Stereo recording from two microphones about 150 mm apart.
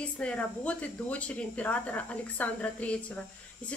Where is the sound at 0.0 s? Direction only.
10° left (ahead or behind).